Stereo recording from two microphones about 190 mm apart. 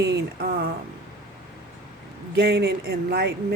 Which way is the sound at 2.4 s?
55° right (ahead or behind).